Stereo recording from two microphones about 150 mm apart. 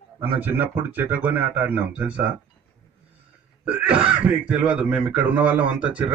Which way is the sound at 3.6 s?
10° right (ahead or behind).